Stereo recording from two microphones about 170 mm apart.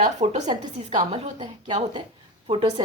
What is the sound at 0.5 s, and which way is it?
A woman's voice, 25° right (ahead or behind).